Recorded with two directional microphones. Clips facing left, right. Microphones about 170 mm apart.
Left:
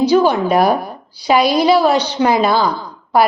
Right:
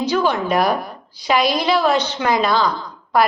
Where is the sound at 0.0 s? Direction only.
35° left (ahead or behind).